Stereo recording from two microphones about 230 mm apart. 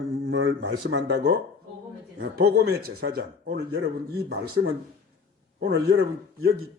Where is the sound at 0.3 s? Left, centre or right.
Right.